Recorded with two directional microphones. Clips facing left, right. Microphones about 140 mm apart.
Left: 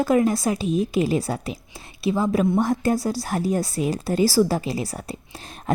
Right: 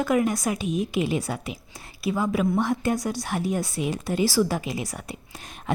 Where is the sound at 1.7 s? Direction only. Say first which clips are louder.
Left 4 dB; 25° left (ahead or behind).